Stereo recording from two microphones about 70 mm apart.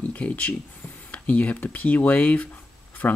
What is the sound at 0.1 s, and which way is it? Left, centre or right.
Speech, left.